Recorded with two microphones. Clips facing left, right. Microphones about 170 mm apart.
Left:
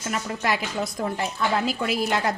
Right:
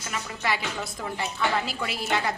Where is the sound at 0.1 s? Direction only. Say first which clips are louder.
Left 4 dB; 45° left (ahead or behind).